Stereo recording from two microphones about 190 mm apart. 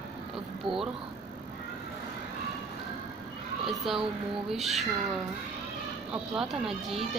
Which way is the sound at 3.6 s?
Centre (ahead or behind).